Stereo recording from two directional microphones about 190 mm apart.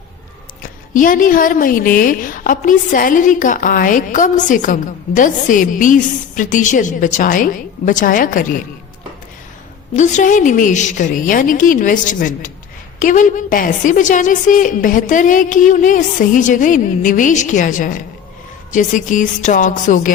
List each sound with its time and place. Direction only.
0.6 s a woman's voice: 45° left (ahead or behind)
9.9 s a woman's voice: 40° left (ahead or behind)